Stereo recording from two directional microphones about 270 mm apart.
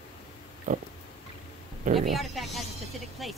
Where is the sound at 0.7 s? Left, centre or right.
Right.